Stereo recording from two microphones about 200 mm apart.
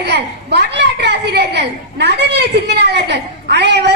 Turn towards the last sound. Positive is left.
turn(degrees=-55)  # may be behind; listen again after turning